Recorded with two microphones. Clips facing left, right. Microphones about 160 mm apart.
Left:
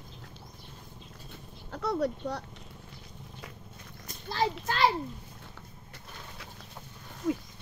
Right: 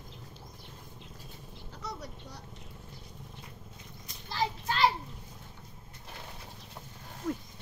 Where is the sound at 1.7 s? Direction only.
60° left (ahead or behind).